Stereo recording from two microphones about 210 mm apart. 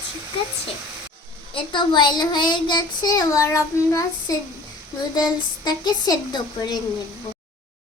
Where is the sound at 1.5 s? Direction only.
20° left (ahead or behind).